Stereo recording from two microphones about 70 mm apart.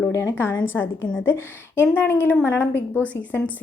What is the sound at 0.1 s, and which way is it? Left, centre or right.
A woman's voice, left.